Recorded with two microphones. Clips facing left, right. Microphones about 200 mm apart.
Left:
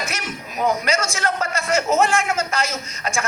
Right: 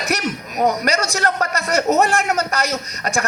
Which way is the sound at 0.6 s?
40° right (ahead or behind).